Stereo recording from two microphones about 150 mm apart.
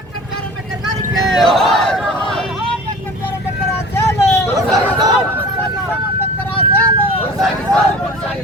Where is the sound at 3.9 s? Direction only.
15° left (ahead or behind).